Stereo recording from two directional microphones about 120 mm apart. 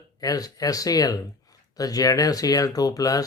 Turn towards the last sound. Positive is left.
turn(degrees=30)  # may be behind; listen again after turning